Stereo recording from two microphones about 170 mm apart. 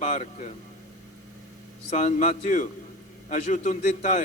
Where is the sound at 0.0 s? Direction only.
45° left (ahead or behind).